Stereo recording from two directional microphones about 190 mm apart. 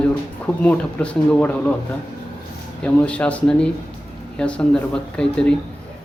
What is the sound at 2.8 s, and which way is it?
Speech, 5° left (ahead or behind).